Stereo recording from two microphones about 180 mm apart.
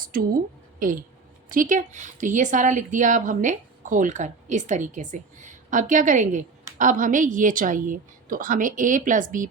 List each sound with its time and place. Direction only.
0.0 s a woman's voice: 50° right (ahead or behind)
1.5 s speech: 45° right (ahead or behind)